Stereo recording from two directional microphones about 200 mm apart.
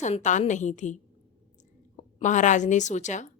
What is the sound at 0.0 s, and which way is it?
Speech, 35° left (ahead or behind).